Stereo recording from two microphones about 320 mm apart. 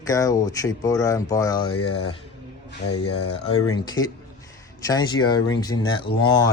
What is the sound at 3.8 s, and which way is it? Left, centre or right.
Speech, centre.